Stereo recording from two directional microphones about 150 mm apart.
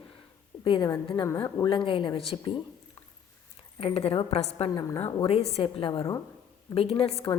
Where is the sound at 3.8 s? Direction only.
40° left (ahead or behind).